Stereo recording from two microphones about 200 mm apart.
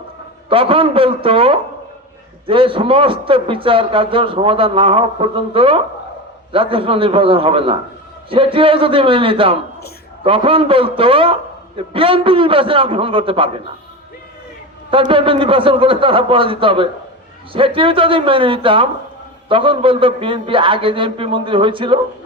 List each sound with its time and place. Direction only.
0.5 s a man's voice: 25° right (ahead or behind)
14.8 s a man's voice: 25° right (ahead or behind)